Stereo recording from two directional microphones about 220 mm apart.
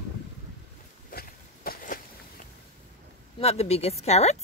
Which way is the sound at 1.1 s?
40° left (ahead or behind).